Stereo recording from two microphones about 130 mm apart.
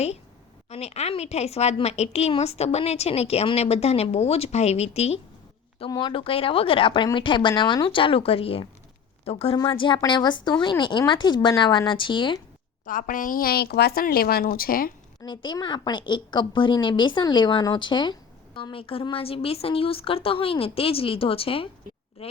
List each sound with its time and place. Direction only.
0.7 s a woman's voice: 55° left (ahead or behind)
5.9 s a woman's voice: 35° left (ahead or behind)
12.8 s a woman's voice: 90° left
15.2 s a woman's voice: 35° left (ahead or behind)